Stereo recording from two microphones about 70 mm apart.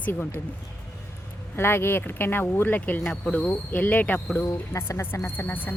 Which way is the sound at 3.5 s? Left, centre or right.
Left.